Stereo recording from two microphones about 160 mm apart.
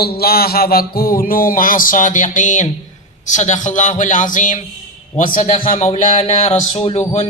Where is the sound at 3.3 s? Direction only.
50° left (ahead or behind).